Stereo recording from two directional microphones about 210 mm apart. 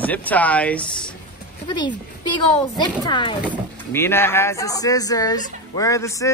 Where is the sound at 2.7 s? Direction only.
20° left (ahead or behind).